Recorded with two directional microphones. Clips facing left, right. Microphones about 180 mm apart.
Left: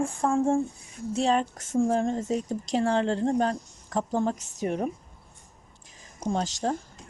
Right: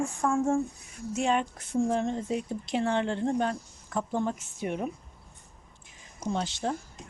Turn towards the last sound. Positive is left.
turn(degrees=40)  # may be behind; listen again after turning